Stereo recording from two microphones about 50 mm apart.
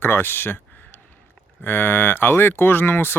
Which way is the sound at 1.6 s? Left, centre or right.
Left.